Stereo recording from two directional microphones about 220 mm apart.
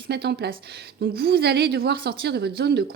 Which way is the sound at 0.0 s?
50° right (ahead or behind).